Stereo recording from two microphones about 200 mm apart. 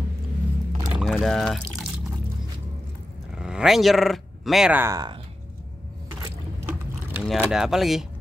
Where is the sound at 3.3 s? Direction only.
5° right (ahead or behind); by 5.2 s 20° right (ahead or behind).